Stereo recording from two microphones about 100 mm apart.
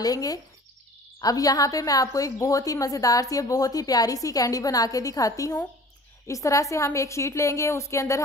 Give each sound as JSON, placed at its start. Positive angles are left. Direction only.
{"t": 0.0, "sound": "a woman's voice", "side_deg": 40}